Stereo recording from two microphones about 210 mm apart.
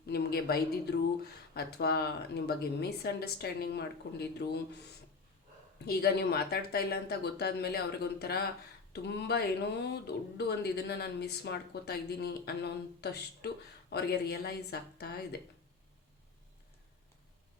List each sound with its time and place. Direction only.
0.0 s a woman's voice: 50° left (ahead or behind)
5.8 s speech: 50° left (ahead or behind)